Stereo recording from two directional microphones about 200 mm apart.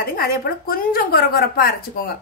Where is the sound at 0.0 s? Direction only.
50° left (ahead or behind).